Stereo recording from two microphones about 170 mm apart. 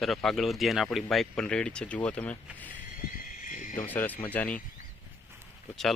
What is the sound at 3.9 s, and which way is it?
Speech, 10° left (ahead or behind).